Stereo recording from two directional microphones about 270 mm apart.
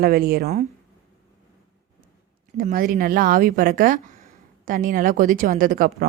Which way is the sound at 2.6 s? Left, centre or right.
Right.